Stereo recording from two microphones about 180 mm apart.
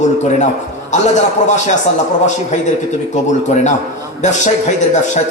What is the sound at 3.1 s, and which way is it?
A man's voice, 40° left (ahead or behind).